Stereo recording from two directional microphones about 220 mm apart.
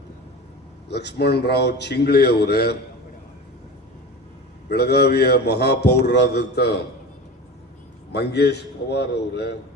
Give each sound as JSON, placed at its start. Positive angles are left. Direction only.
{"t": 0.9, "sound": "a man's voice", "side_deg": 50}
{"t": 4.7, "sound": "a man's voice", "side_deg": 45}
{"t": 8.1, "sound": "a man's voice", "side_deg": 50}